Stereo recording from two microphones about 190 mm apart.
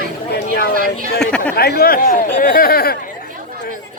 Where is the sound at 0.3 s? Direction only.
55° left (ahead or behind).